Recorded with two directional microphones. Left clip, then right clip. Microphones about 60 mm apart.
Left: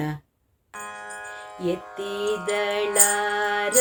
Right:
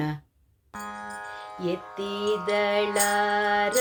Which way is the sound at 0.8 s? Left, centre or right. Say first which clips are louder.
Even; left.